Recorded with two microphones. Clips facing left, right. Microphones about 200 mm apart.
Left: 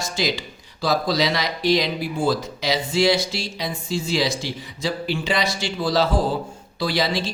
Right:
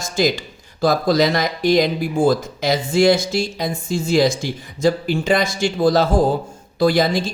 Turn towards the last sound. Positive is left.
turn(degrees=-50)  # may be behind; listen again after turning